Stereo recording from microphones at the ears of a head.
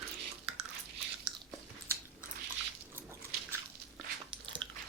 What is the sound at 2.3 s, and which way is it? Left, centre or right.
Dog, right.